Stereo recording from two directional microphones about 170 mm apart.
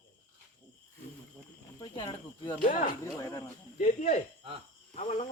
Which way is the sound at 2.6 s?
50° left (ahead or behind).